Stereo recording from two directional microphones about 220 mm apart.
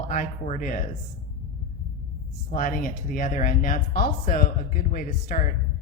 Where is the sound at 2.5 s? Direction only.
40° left (ahead or behind).